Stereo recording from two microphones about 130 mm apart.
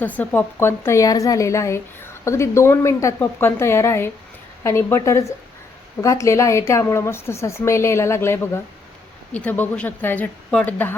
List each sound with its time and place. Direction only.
0.0 s a woman's voice: 10° left (ahead or behind)